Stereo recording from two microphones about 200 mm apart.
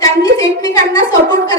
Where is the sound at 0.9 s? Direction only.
15° left (ahead or behind).